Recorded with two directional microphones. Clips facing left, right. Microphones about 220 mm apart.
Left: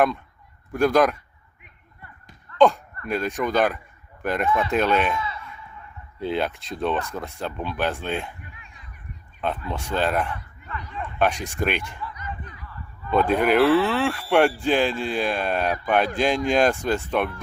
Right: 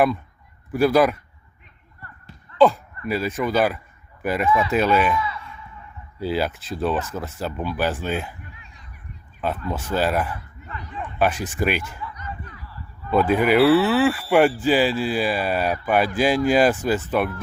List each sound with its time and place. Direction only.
0.7 s speech: 5° right (ahead or behind)
2.6 s speech: centre (ahead or behind)
5.1 s speech: 25° left (ahead or behind)
6.1 s speech: 5° right (ahead or behind)
9.4 s speech: 5° right (ahead or behind)
10.7 s a sound: 25° right (ahead or behind)
11.2 s speech: 5° right (ahead or behind)
13.1 s speech: 5° right (ahead or behind)